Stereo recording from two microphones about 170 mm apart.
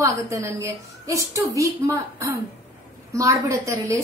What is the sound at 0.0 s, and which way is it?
A woman's voice, 20° right (ahead or behind).